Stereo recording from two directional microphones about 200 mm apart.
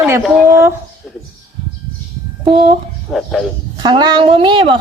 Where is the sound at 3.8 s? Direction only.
20° right (ahead or behind).